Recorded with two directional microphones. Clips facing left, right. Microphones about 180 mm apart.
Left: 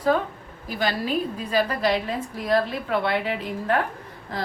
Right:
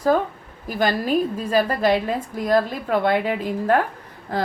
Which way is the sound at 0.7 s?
50° right (ahead or behind).